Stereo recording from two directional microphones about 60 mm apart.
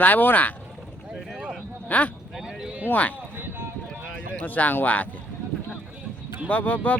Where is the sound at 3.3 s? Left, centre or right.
Right.